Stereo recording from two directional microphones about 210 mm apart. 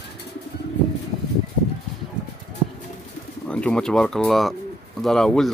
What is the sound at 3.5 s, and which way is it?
Speech, 5° left (ahead or behind).